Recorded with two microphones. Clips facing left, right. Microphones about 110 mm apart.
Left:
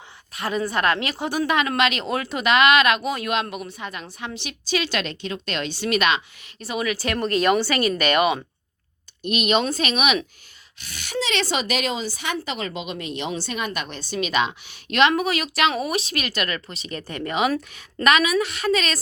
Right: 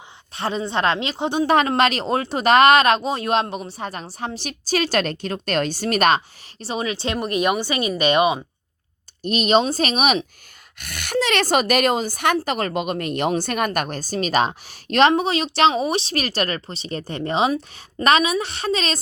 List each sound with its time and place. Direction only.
0.3 s speech: 30° right (ahead or behind)
1.5 s speech: 35° right (ahead or behind); by 8.4 s 20° right (ahead or behind)
9.2 s speech: 35° right (ahead or behind)
10.8 s a woman's voice: 55° right (ahead or behind); by 18.9 s 30° right (ahead or behind)